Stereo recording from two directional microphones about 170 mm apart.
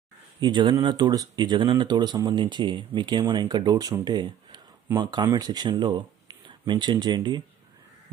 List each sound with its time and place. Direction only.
0.4 s speech: 25° right (ahead or behind)